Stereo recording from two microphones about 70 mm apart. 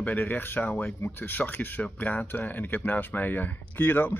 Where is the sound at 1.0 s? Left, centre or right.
Left.